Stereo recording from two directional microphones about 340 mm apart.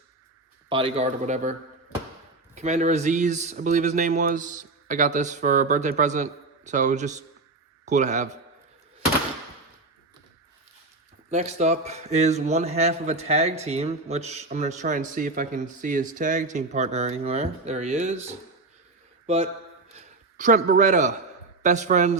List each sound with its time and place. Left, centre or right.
0.7 s a man's voice: centre
2.6 s a man's voice: right
11.3 s a man's voice: right
20.0 s a man's voice: right